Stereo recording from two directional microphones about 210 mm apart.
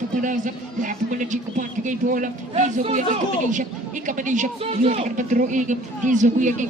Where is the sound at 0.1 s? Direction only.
40° right (ahead or behind).